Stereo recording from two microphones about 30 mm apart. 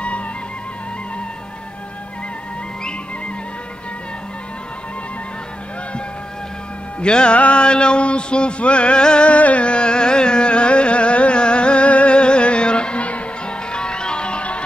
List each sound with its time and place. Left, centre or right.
7.0 s a sound: left
7.3 s carnatic music: left
7.6 s a sound: left
9.3 s carnatic music: left
9.7 s carnatic music: left
13.5 s music: left